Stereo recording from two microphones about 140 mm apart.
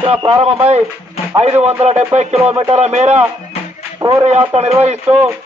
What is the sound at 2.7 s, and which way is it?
Speech, 55° right (ahead or behind).